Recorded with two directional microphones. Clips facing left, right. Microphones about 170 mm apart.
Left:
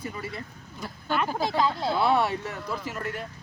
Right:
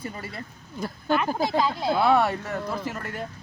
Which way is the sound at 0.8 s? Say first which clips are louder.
Right 5 dB; 45° right (ahead or behind).